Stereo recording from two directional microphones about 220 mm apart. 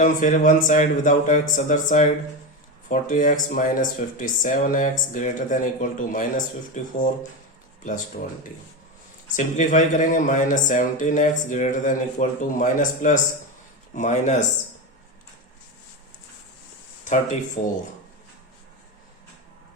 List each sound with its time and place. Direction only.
0.0 s speech: 35° left (ahead or behind)
17.1 s speech: 35° left (ahead or behind)